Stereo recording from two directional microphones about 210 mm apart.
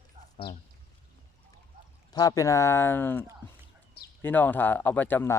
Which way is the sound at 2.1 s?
15° left (ahead or behind).